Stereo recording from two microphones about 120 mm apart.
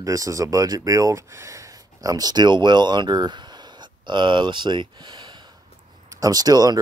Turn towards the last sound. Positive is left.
turn(degrees=-35)  # may be behind; listen again after turning